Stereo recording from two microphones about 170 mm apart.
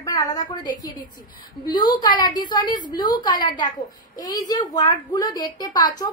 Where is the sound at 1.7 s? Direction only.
30° left (ahead or behind).